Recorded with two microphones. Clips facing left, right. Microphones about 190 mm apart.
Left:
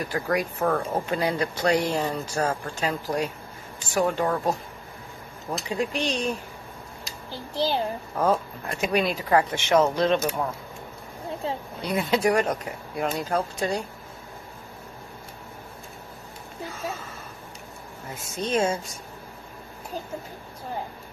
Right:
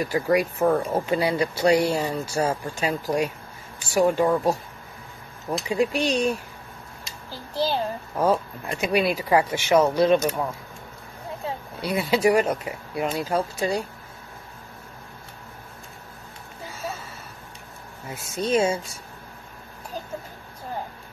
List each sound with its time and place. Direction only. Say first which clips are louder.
0.0 s speech: right 4 dB; 10° right (ahead or behind)
5.7 s speech: right 4 dB; 10° right (ahead or behind)
7.6 s a child's voice: even; 15° left (ahead or behind)
8.2 s speech: right 2 dB; 10° right (ahead or behind)
11.4 s a sound: left 1 dB; 30° left (ahead or behind)
11.8 s speech: right 2 dB; 10° right (ahead or behind)
18.1 s speech: right 3 dB; 10° right (ahead or behind)